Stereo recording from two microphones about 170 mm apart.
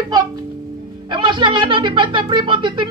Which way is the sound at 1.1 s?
30° right (ahead or behind).